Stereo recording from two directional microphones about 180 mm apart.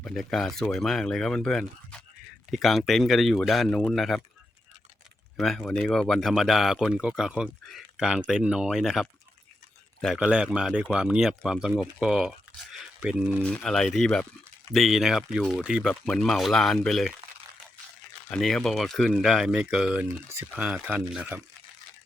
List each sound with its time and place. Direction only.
0.0 s speech: centre (ahead or behind)
5.4 s speech: 5° left (ahead or behind)
12.7 s a sound: 5° right (ahead or behind)
13.4 s speech: 5° left (ahead or behind)
18.3 s speech: 5° left (ahead or behind)